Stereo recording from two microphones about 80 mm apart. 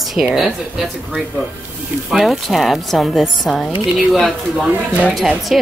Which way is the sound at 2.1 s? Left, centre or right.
Centre.